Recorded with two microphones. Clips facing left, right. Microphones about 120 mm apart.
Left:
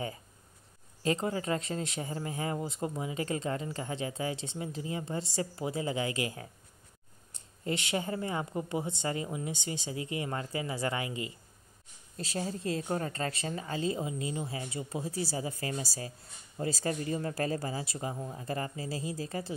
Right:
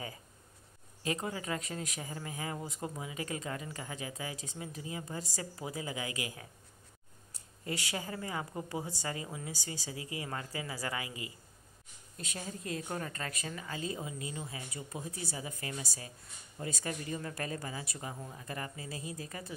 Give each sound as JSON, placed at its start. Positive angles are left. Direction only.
{"t": 1.0, "sound": "speech", "side_deg": 30}
{"t": 7.6, "sound": "speech", "side_deg": 25}